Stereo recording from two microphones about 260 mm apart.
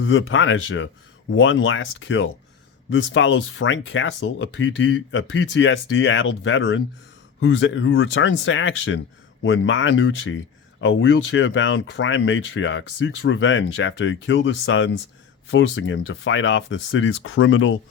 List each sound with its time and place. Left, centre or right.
0.0 s speech: left